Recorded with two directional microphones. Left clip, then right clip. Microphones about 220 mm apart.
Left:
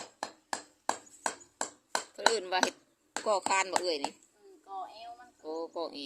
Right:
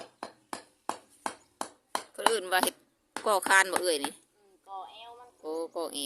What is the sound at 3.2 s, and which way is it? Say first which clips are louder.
Speech: right 5 dB; 35° right (ahead or behind).